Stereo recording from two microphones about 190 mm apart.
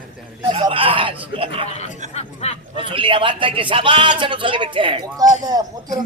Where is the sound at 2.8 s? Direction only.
25° right (ahead or behind).